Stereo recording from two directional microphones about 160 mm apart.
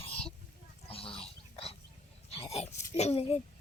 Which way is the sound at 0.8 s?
35° left (ahead or behind).